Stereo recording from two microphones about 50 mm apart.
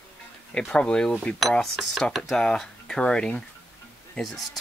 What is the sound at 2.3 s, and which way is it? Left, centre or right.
Speech, centre.